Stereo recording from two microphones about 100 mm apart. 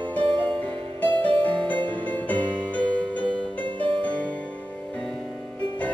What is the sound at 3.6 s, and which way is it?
Music, 55° right (ahead or behind).